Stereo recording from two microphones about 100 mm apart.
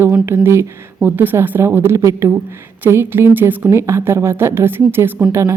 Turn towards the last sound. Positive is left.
turn(degrees=-30)  # may be behind; listen again after turning